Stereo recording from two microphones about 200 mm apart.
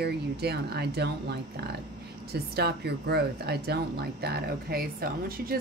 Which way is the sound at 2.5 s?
55° right (ahead or behind).